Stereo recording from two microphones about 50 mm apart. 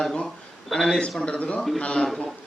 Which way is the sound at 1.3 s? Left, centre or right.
Left.